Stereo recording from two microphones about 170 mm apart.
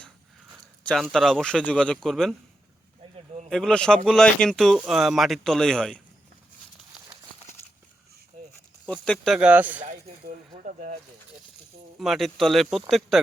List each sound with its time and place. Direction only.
1.1 s speech: centre (ahead or behind)
3.5 s speech: 5° left (ahead or behind)
8.9 s speech: 5° left (ahead or behind)
11.9 s speech: centre (ahead or behind)